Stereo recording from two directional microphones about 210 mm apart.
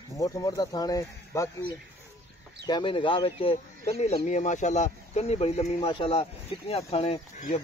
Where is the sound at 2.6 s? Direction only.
20° left (ahead or behind).